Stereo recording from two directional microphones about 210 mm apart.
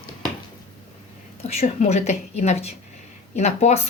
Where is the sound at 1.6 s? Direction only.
30° left (ahead or behind).